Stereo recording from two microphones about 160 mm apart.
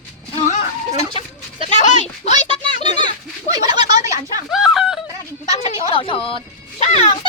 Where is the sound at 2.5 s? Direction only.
30° right (ahead or behind).